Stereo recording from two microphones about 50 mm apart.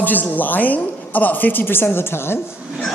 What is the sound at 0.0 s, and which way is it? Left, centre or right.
A man's voice, left.